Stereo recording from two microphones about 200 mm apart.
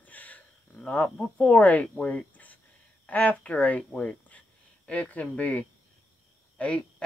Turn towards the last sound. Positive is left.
turn(degrees=5)  # may be behind; listen again after turning